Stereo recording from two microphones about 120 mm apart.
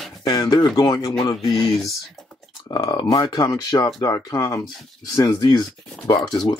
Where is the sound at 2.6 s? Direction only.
35° left (ahead or behind).